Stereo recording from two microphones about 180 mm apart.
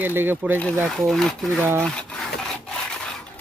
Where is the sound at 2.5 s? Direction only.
5° left (ahead or behind).